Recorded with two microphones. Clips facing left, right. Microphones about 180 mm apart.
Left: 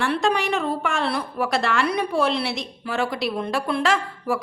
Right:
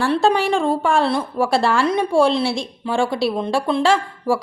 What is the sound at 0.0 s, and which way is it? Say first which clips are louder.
A woman's voice: right 5 dB; 30° right (ahead or behind).